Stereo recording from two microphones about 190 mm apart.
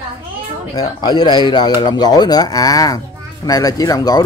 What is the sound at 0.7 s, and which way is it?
Speech, 20° left (ahead or behind).